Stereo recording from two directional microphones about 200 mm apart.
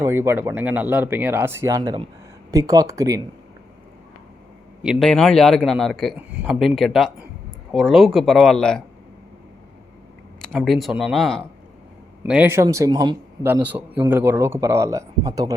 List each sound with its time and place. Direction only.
0.0 s speech: 10° right (ahead or behind)
4.8 s a man's voice: centre (ahead or behind)
10.5 s a man's voice: centre (ahead or behind)
12.2 s speech: 10° right (ahead or behind)